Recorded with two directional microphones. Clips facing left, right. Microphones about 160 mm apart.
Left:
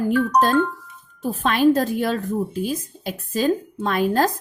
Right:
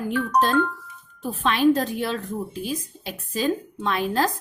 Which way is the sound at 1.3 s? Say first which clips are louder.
Left 2 dB; 45° left (ahead or behind).